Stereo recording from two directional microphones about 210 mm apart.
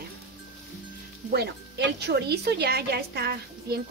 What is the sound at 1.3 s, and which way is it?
A woman's voice, 50° right (ahead or behind).